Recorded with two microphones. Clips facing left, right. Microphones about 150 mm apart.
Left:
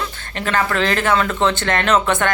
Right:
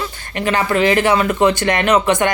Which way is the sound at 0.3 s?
15° right (ahead or behind).